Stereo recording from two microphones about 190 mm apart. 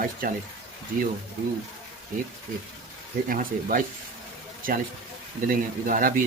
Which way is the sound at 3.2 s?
45° right (ahead or behind).